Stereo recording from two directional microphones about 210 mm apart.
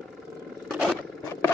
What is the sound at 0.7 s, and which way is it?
Roar, centre (ahead or behind).